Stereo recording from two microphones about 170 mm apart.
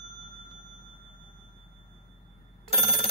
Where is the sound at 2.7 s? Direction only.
Centre (ahead or behind).